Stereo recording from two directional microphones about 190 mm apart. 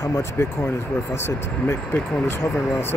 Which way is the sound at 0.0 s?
15° left (ahead or behind).